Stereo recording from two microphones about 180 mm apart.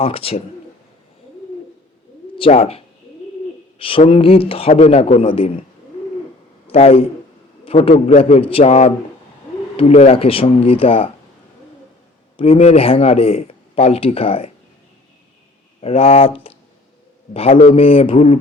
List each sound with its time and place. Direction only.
0.0 s speech: 30° left (ahead or behind)
2.4 s speech: 35° left (ahead or behind)
6.7 s a man's voice: 35° left (ahead or behind)
12.4 s speech: 35° left (ahead or behind)
15.8 s speech: 35° left (ahead or behind)